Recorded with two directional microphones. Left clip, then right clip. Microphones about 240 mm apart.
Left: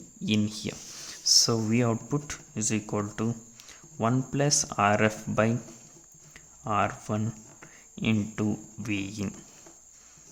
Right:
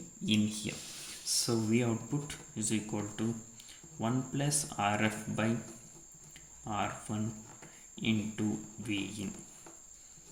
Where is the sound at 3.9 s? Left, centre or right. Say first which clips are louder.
Left 8 dB; left.